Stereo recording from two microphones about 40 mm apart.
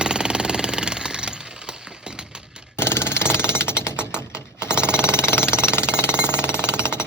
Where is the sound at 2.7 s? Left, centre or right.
Left.